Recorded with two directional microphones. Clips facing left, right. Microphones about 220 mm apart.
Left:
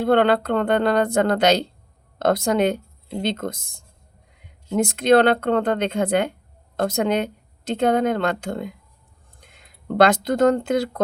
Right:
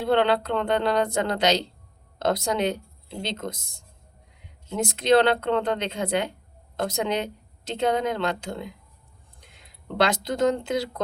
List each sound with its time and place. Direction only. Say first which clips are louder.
0.0 s speech: left 4 dB; 50° left (ahead or behind)